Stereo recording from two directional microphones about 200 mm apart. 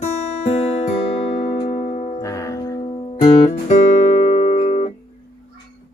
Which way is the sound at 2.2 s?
15° left (ahead or behind).